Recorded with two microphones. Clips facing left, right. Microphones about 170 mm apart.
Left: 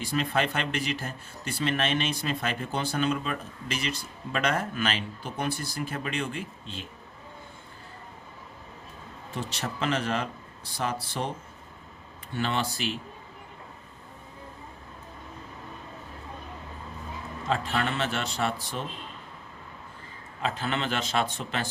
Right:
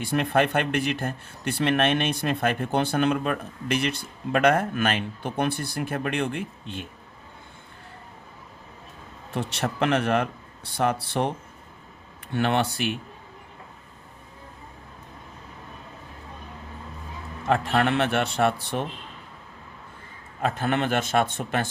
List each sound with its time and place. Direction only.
0.0 s speech: 60° right (ahead or behind)
9.3 s speech: 60° right (ahead or behind)
12.3 s speech: 60° right (ahead or behind)
17.4 s speech: 60° right (ahead or behind)
20.4 s a man's voice: 55° right (ahead or behind)